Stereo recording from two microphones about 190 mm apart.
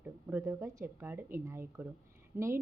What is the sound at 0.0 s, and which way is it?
A woman's voice, 10° right (ahead or behind).